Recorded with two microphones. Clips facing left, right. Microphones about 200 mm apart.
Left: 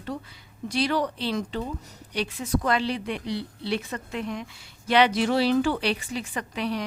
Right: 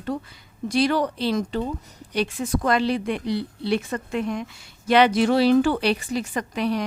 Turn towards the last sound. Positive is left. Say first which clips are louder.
# right 5 dB
turn(degrees=-45)  # may be behind; listen again after turning